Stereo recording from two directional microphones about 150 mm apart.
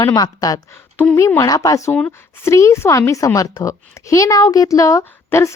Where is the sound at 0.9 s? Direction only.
15° left (ahead or behind).